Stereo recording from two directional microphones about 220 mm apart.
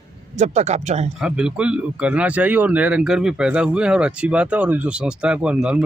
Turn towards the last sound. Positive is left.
turn(degrees=-5)  # may be behind; listen again after turning